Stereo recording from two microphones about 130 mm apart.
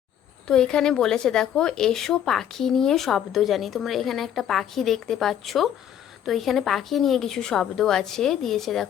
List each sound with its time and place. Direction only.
0.4 s speech: 5° left (ahead or behind)